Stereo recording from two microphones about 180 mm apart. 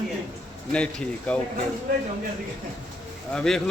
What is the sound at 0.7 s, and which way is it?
Speech, 5° left (ahead or behind).